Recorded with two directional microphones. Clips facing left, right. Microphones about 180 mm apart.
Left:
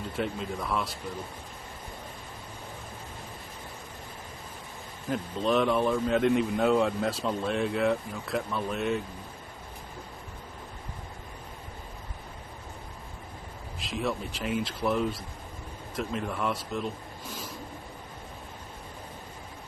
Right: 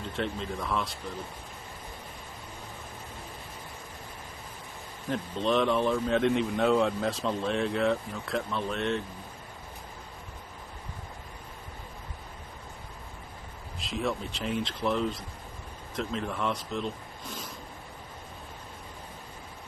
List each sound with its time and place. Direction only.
0.2 s speech: 5° left (ahead or behind)
5.0 s speech: 5° left (ahead or behind)
13.7 s speech: centre (ahead or behind)